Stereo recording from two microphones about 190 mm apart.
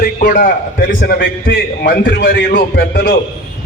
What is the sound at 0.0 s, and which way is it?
A man's voice, 45° left (ahead or behind).